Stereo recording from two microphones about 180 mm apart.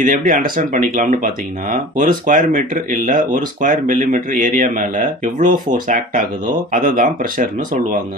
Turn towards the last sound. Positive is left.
turn(degrees=-50)  # may be behind; listen again after turning